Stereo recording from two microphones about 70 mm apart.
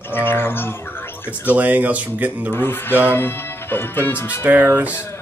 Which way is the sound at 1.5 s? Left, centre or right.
Right.